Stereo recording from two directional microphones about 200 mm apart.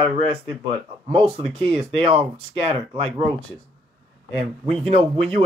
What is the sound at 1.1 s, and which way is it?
Speech, 30° right (ahead or behind).